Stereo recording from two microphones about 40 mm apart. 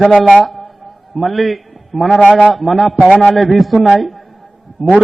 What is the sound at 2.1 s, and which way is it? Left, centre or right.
Speech, left.